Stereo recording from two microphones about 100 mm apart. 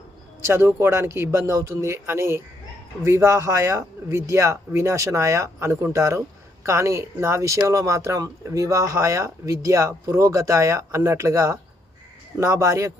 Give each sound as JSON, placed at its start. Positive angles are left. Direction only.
{"t": 0.4, "sound": "a man's voice", "side_deg": -25}